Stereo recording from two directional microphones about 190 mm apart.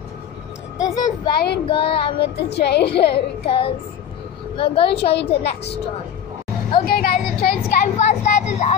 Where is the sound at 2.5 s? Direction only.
60° left (ahead or behind).